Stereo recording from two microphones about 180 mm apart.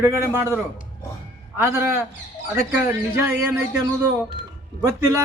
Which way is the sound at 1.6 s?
15° right (ahead or behind).